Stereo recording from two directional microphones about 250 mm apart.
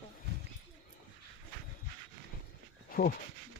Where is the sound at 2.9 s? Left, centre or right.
Left.